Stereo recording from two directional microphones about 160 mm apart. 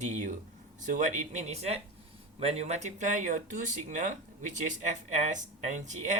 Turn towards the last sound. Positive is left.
turn(degrees=-50)  # may be behind; listen again after turning